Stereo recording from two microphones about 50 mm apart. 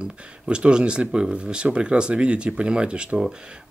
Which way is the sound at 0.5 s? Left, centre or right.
Centre.